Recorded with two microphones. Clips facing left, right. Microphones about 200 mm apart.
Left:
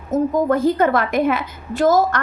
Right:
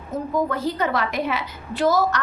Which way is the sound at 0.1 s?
50° left (ahead or behind).